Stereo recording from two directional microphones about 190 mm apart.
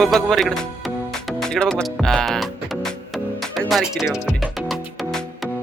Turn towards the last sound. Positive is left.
turn(degrees=5)  # may be behind; listen again after turning